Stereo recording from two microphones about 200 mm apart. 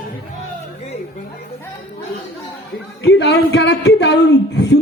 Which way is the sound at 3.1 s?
55° left (ahead or behind).